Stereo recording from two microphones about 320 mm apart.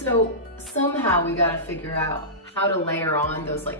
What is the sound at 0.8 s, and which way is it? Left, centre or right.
Speech, centre.